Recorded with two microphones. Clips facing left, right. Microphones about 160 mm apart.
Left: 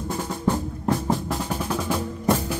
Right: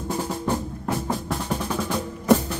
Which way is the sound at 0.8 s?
Centre (ahead or behind).